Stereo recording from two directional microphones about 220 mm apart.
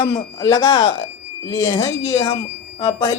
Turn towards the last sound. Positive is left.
turn(degrees=20)  # may be behind; listen again after turning